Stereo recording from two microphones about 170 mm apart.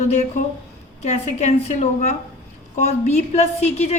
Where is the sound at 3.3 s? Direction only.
40° left (ahead or behind).